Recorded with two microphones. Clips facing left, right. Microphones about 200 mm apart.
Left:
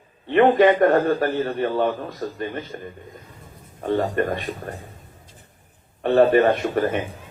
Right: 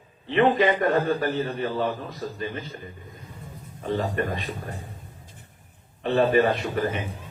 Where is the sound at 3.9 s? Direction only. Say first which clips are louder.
Left 5 dB; 50° left (ahead or behind).